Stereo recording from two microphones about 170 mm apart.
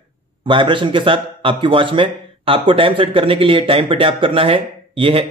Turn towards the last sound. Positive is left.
turn(degrees=-30)  # may be behind; listen again after turning